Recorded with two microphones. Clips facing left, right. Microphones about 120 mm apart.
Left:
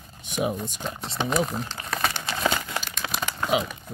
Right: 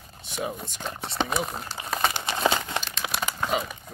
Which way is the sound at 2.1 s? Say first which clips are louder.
Right 2 dB; 20° right (ahead or behind).